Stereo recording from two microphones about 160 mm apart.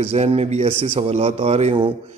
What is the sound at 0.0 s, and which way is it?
A man's voice, 40° right (ahead or behind).